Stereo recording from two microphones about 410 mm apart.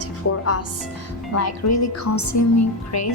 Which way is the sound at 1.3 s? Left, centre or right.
Left.